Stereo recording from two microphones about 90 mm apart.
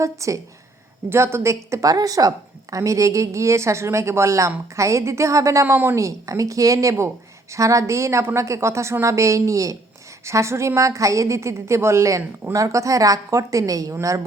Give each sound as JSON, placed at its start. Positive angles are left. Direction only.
{"t": 0.0, "sound": "a woman's voice", "side_deg": -35}
{"t": 5.6, "sound": "a woman's voice", "side_deg": -25}
{"t": 6.0, "sound": "a woman's voice", "side_deg": -35}